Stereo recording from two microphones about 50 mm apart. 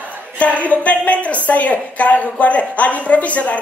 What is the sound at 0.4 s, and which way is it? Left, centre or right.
A woman's voice, left.